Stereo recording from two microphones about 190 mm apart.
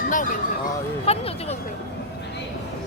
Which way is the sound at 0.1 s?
45° left (ahead or behind).